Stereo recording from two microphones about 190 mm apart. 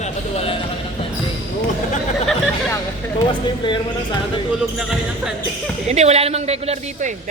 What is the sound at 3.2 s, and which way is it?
Speech, 25° left (ahead or behind).